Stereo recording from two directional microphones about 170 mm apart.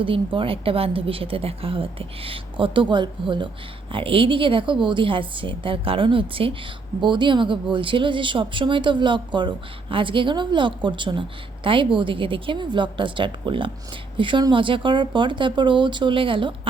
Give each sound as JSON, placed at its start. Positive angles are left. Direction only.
{"t": 0.0, "sound": "a woman's voice", "side_deg": -30}